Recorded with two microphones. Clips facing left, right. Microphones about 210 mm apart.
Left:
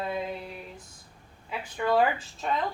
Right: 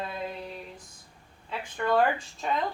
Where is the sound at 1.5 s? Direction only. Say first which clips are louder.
Left 1 dB; 5° left (ahead or behind).